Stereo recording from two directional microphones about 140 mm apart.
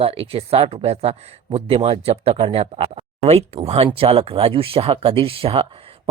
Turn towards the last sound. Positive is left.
turn(degrees=-40)  # may be behind; listen again after turning